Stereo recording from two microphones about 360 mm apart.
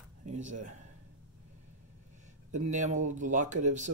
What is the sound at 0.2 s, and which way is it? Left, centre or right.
Speech, centre.